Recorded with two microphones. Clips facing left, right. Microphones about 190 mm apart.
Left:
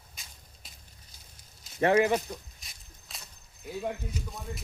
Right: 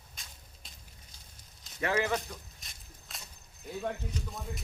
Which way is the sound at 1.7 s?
35° left (ahead or behind).